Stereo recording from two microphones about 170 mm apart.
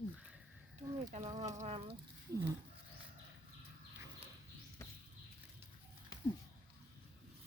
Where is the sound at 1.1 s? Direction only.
45° right (ahead or behind).